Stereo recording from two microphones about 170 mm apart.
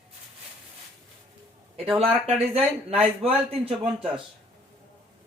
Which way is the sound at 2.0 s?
35° right (ahead or behind).